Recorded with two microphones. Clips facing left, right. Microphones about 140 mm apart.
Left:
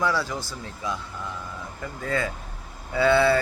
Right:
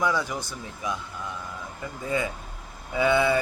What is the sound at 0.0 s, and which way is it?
Speech, 15° right (ahead or behind).